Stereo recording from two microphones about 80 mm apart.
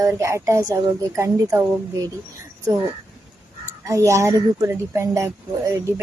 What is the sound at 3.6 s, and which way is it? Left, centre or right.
A child's voice, right.